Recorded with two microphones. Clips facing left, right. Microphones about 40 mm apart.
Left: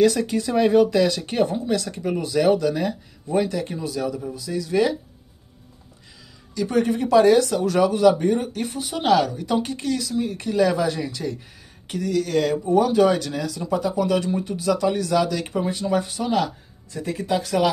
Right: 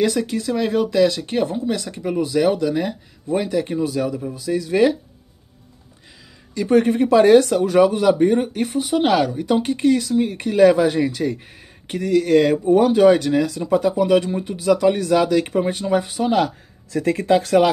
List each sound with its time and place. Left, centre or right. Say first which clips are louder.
0.0 s speech: left 1 dB; centre
3.8 s speech: right 4 dB; right
6.5 s speech: right 5 dB; right
7.5 s speech: right 4 dB; right
17.0 s speech: right 7 dB; right